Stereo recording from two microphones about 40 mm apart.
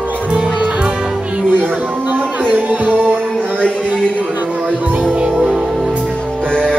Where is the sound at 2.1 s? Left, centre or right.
Right.